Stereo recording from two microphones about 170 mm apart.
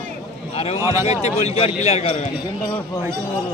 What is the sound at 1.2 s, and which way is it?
Speech, 40° left (ahead or behind).